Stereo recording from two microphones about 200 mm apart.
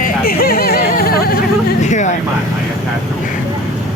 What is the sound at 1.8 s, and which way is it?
Vehicle, 35° left (ahead or behind).